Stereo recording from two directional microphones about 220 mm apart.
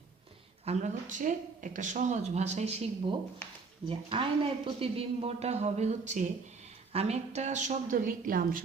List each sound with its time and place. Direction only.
0.6 s speech: 30° right (ahead or behind)